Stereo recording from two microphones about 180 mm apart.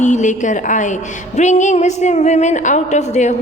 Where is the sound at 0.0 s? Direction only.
40° left (ahead or behind).